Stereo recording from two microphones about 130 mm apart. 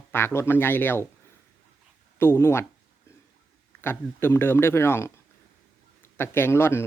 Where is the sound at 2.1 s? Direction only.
20° left (ahead or behind).